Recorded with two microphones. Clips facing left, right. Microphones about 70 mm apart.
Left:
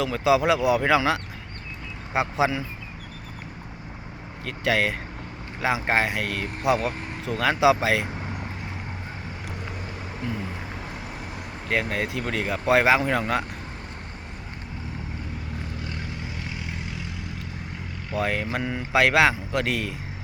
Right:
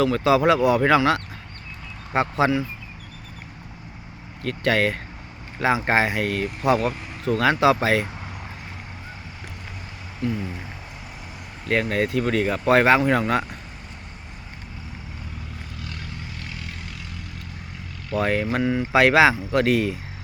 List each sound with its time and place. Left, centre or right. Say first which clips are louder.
0.0 s speech: right 3 dB; centre
4.4 s speech: right 3 dB; centre
11.7 s speech: right 4 dB; centre
15.8 s vehicle: left 2 dB; left
18.1 s speech: right 4 dB; centre